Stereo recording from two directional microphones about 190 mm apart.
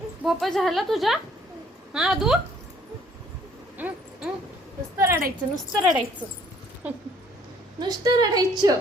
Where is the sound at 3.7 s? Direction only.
10° right (ahead or behind).